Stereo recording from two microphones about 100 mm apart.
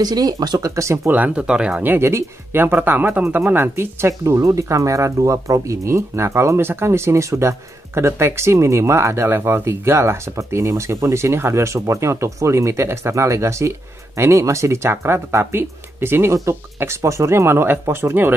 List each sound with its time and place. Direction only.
0.0 s speech: 40° right (ahead or behind)
1.1 s speech: 15° right (ahead or behind)